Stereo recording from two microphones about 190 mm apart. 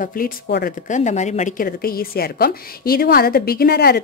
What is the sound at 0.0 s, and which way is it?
A woman's voice, 50° left (ahead or behind).